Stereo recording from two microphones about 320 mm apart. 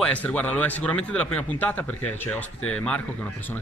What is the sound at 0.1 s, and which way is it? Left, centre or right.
Speech, centre.